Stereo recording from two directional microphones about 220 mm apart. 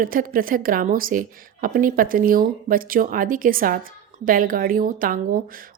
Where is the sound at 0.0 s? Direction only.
40° right (ahead or behind).